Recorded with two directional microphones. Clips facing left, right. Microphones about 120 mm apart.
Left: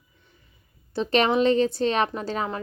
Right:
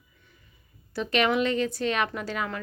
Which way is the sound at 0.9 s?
30° left (ahead or behind).